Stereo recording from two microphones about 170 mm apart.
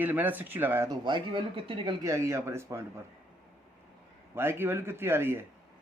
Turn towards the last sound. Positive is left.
turn(degrees=-15)  # may be behind; listen again after turning